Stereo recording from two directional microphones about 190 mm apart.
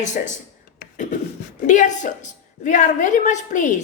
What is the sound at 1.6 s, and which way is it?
A woman's voice, 40° left (ahead or behind).